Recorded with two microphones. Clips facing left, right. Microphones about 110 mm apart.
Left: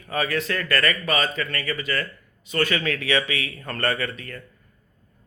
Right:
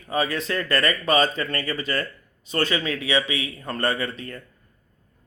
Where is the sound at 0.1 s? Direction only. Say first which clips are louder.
Right 1 dB; 20° right (ahead or behind).